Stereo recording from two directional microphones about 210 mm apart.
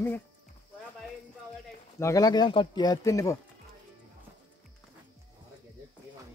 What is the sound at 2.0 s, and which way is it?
Speech, 15° left (ahead or behind).